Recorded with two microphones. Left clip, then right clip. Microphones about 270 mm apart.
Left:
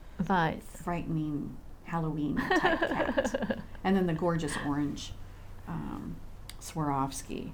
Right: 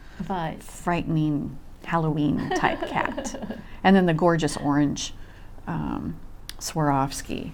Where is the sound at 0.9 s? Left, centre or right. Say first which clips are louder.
Right 9 dB; right.